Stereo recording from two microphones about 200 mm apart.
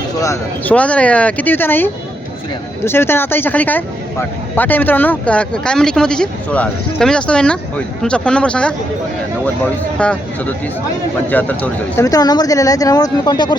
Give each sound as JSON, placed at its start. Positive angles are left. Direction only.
{"t": 0.2, "sound": "speech", "side_deg": 10}
{"t": 10.0, "sound": "speech", "side_deg": 5}
{"t": 11.3, "sound": "speech", "side_deg": 10}